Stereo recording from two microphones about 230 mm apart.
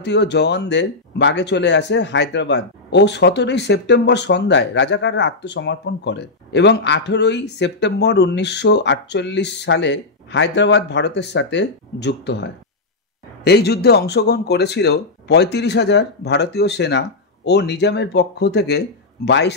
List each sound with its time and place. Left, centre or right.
0.0 s speech: left